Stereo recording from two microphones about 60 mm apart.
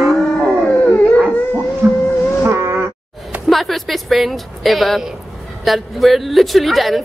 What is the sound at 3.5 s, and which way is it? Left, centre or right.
Speech, centre.